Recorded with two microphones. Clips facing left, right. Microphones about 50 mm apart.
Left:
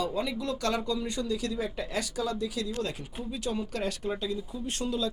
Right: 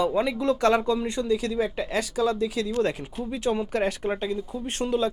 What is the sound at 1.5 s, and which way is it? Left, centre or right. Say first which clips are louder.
Speech: right 6 dB; right.